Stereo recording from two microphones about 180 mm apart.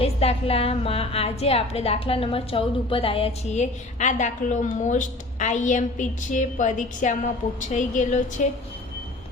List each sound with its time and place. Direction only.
0.0 s a woman's voice: 35° left (ahead or behind)